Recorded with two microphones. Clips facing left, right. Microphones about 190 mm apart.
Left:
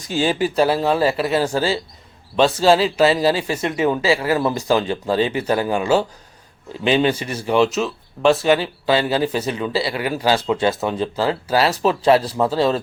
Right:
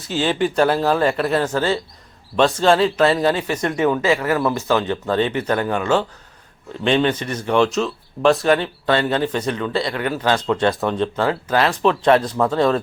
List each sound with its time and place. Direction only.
0.0 s speech: 10° left (ahead or behind)
3.4 s speech: 30° left (ahead or behind); by 11.1 s 5° left (ahead or behind)
11.2 s speech: 30° left (ahead or behind)
11.5 s speech: 10° left (ahead or behind)
12.5 s speech: 30° left (ahead or behind)